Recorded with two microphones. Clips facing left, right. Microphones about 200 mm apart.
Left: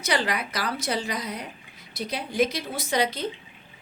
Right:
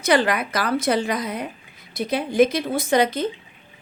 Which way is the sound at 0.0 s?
50° right (ahead or behind).